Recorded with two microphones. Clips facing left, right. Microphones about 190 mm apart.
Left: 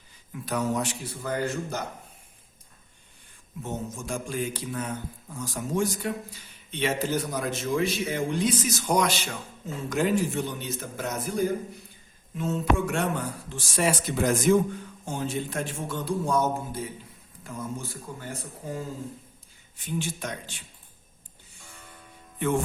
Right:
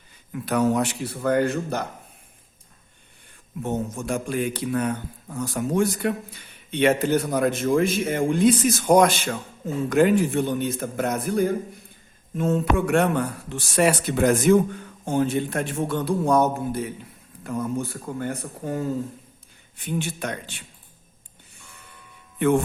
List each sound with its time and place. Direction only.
0.4 s a man's voice: 65° right (ahead or behind)
3.6 s a man's voice: 60° right (ahead or behind)
22.4 s speech: 60° right (ahead or behind)